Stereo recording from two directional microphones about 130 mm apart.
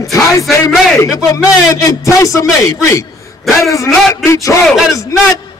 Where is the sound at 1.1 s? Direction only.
25° left (ahead or behind).